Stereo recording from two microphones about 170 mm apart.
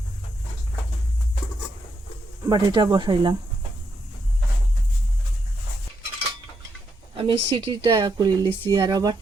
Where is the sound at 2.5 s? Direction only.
25° right (ahead or behind).